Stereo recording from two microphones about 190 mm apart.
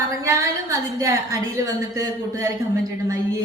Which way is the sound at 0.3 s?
15° right (ahead or behind).